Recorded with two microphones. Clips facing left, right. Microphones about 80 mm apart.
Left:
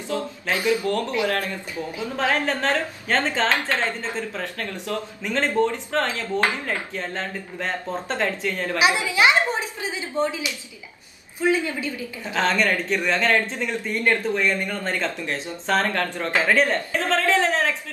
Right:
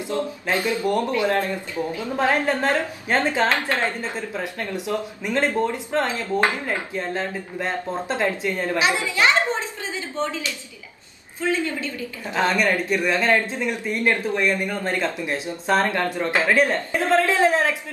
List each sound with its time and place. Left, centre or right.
0.8 s a woman's voice: right
8.7 s a woman's voice: centre
12.4 s speech: centre